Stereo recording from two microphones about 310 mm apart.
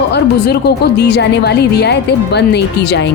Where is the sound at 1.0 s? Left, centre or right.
Left.